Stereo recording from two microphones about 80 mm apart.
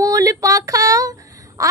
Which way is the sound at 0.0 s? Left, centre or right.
Right.